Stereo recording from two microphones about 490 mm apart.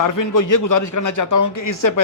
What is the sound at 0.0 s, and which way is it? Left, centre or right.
Speech, left.